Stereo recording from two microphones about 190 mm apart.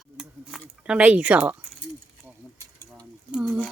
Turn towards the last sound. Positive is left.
turn(degrees=-5)  # may be behind; listen again after turning